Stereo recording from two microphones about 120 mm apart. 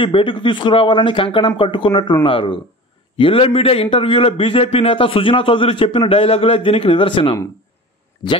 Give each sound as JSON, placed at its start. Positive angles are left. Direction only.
{"t": 0.0, "sound": "a man's voice", "side_deg": 45}
{"t": 8.2, "sound": "speech", "side_deg": 35}